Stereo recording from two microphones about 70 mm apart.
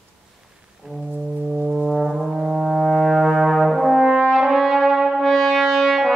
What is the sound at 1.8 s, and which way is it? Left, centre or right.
Brass instrument, centre.